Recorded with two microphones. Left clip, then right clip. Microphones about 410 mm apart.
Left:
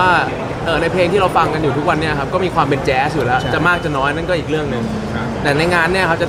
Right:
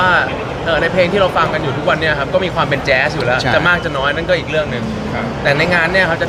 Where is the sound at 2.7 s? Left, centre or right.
Left.